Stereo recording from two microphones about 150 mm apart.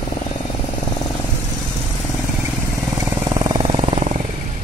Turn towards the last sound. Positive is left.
turn(degrees=-40)  # may be behind; listen again after turning